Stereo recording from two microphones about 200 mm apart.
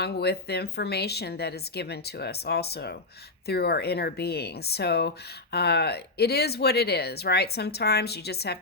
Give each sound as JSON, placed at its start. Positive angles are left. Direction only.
{"t": 0.0, "sound": "speech", "side_deg": 55}